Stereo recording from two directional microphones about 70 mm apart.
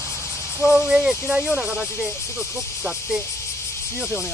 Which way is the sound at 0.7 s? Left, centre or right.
Centre.